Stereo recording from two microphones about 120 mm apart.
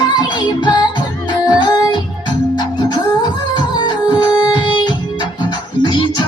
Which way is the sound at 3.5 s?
35° left (ahead or behind).